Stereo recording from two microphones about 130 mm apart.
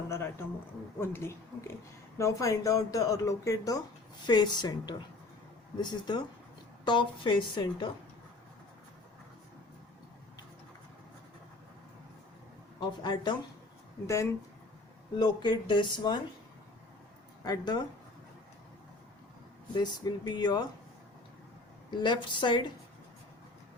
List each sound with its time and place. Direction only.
0.1 s a woman's voice: 20° left (ahead or behind); by 7.9 s 40° left (ahead or behind)
12.8 s a woman's voice: 35° left (ahead or behind)
15.2 s a woman's voice: 35° left (ahead or behind)
17.4 s a woman's voice: 30° left (ahead or behind)
19.7 s a woman's voice: 35° left (ahead or behind)
21.8 s a woman's voice: 35° left (ahead or behind)